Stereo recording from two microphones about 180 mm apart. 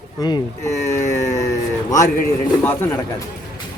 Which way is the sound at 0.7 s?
40° left (ahead or behind).